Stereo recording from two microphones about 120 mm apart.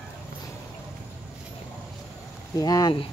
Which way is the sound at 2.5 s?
30° left (ahead or behind).